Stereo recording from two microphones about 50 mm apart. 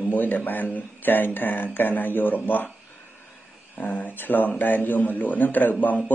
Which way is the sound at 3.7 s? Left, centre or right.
Left.